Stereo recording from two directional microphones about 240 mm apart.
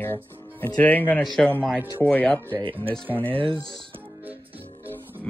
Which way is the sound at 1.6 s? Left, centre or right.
Centre.